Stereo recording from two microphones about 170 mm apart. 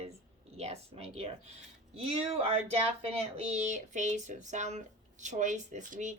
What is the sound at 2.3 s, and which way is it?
Speech, 35° right (ahead or behind).